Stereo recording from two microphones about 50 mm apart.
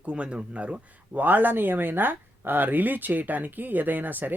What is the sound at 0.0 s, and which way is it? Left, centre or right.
Speech, right.